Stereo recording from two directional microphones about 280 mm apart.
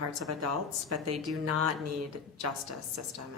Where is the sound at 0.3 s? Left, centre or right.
Right.